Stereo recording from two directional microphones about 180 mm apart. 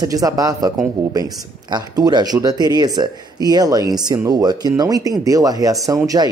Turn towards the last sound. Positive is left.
turn(degrees=-20)  # may be behind; listen again after turning